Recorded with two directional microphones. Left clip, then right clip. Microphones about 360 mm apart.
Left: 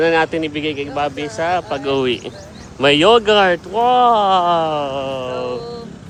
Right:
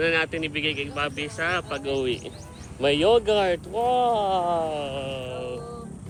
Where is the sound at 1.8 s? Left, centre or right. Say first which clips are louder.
Left 9 dB; left.